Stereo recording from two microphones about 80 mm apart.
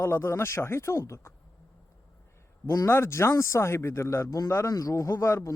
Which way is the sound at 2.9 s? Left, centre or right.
Left.